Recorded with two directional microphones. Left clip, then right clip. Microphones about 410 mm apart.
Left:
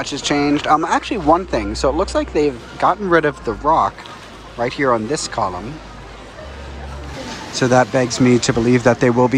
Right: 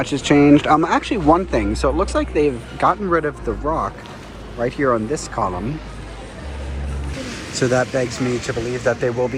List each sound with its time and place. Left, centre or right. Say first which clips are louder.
0.0 s speech: right 3 dB; centre
7.6 s speech: left 4 dB; left